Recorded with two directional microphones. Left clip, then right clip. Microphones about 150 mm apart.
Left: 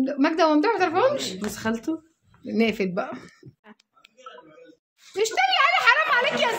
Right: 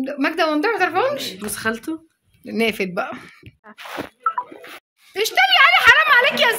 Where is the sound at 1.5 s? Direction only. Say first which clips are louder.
Right 7 dB; 30° left (ahead or behind).